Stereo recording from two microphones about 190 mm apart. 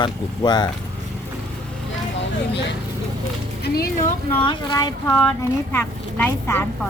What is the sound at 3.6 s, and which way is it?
Music, 55° left (ahead or behind).